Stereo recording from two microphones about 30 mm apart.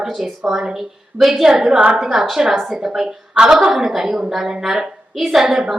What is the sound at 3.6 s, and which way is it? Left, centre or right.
A woman's voice, centre.